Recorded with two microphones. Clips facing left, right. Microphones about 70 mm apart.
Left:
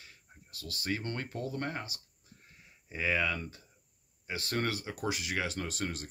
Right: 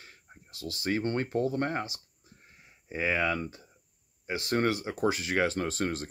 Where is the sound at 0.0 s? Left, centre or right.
Right.